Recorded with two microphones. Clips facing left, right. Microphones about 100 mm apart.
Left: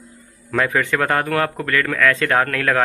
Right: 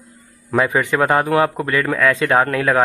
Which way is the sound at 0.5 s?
15° right (ahead or behind).